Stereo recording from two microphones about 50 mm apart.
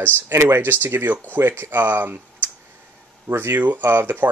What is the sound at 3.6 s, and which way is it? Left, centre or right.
Speech, right.